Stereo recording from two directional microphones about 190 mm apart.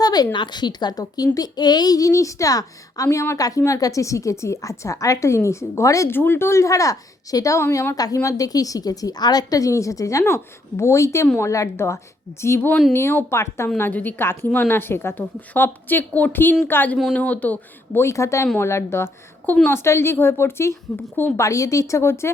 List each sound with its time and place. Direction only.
0.0 s speech: 20° left (ahead or behind)